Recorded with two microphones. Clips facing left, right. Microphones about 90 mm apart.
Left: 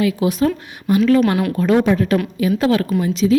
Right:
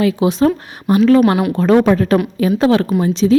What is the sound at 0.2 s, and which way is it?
Speech, 25° right (ahead or behind).